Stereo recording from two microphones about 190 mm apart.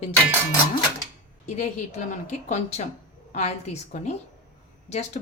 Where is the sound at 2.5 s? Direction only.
35° left (ahead or behind).